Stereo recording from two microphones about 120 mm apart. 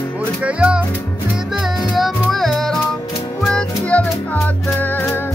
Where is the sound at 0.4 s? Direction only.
10° right (ahead or behind).